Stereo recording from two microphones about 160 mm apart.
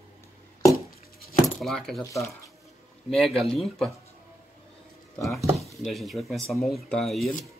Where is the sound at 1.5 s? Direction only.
5° left (ahead or behind).